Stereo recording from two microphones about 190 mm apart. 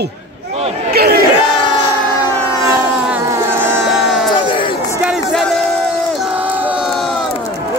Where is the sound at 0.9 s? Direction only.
55° right (ahead or behind).